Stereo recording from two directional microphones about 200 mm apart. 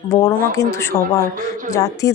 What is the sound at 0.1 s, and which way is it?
Speech, 15° left (ahead or behind).